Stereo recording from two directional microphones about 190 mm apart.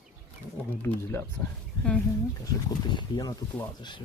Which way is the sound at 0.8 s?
15° left (ahead or behind).